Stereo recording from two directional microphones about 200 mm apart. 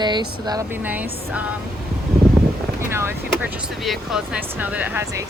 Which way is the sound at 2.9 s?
10° right (ahead or behind).